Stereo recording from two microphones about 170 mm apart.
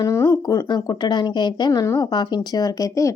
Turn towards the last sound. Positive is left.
turn(degrees=20)  # may be behind; listen again after turning